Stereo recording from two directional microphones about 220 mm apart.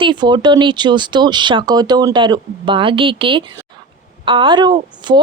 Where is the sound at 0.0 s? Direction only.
20° right (ahead or behind).